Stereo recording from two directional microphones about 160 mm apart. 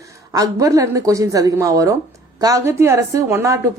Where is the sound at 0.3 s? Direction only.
20° right (ahead or behind).